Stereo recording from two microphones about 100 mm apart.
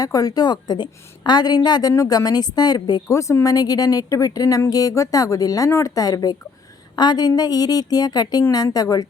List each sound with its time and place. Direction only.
0.0 s a woman's voice: 35° left (ahead or behind)
3.1 s a woman's voice: 30° left (ahead or behind)